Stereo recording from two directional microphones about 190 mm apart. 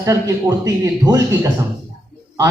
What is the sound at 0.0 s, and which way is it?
A woman's voice, 15° right (ahead or behind).